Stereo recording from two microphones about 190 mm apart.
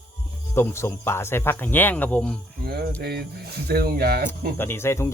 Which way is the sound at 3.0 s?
60° right (ahead or behind).